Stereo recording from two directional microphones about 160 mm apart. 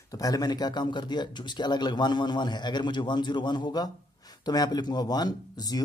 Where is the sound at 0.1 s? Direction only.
25° left (ahead or behind).